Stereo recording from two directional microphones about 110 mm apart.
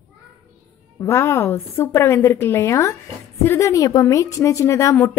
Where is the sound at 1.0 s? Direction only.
25° left (ahead or behind).